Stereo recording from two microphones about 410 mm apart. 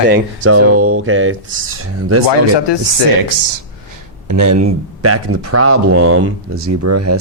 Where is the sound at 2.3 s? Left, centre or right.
Left.